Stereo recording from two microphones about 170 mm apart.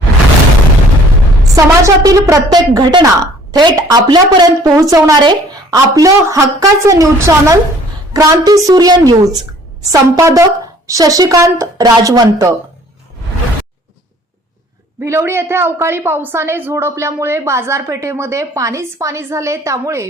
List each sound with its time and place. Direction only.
1.5 s a woman's voice: 20° right (ahead or behind)
15.0 s a woman's voice: 15° right (ahead or behind)